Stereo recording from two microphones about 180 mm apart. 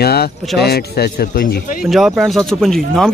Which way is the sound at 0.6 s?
60° left (ahead or behind).